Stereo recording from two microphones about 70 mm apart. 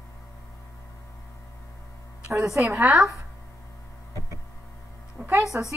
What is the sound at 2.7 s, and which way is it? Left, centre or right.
Speech, right.